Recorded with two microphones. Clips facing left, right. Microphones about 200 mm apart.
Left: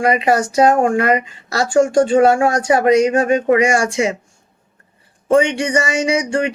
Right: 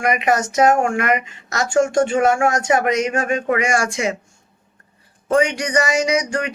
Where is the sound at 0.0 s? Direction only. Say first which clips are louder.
Left 3 dB; 30° left (ahead or behind).